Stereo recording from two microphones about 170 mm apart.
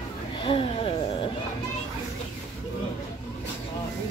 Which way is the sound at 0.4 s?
30° left (ahead or behind).